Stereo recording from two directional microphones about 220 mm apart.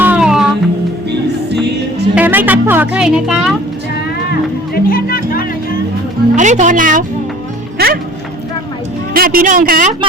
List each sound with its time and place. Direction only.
0.0 s music: 5° right (ahead or behind)
2.1 s music: 10° right (ahead or behind)
4.3 s music: 45° left (ahead or behind)
6.3 s a woman's voice: 35° right (ahead or behind)
9.1 s a woman's voice: 40° right (ahead or behind)